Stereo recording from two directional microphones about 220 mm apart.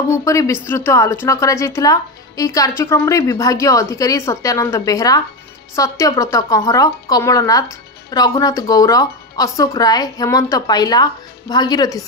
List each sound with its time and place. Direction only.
0.1 s a woman's voice: 15° left (ahead or behind)